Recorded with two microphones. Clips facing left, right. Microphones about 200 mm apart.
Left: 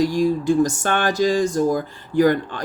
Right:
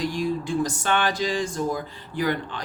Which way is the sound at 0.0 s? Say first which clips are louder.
Left 7 dB; 45° left (ahead or behind).